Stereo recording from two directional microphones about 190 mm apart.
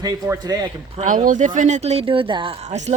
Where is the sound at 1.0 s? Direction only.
45° right (ahead or behind).